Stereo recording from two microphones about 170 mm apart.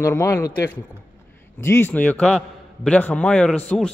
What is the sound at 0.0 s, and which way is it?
Speech, 15° left (ahead or behind).